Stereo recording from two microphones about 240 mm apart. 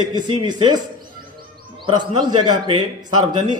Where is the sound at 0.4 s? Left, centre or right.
Centre.